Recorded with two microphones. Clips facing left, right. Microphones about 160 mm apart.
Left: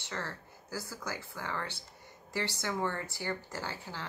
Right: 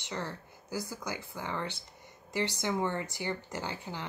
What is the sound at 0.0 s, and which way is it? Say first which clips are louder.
Speech: right 2 dB; 15° right (ahead or behind).